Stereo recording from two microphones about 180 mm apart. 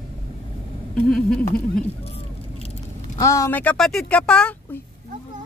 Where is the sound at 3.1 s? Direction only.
15° left (ahead or behind).